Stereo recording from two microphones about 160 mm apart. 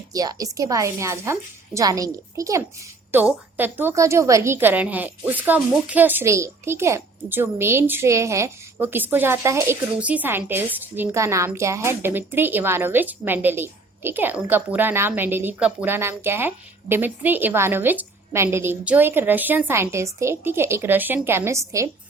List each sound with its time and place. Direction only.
0.1 s a woman's voice: 20° right (ahead or behind)